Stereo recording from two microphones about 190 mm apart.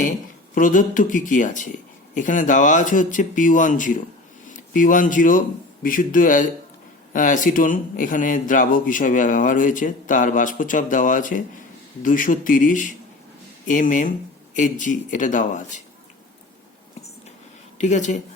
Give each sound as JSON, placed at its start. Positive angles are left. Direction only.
{"t": 0.5, "sound": "speech", "side_deg": 45}
{"t": 17.7, "sound": "speech", "side_deg": 40}